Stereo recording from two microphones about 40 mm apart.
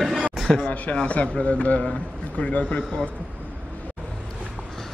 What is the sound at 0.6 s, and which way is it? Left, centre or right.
A man's voice, left.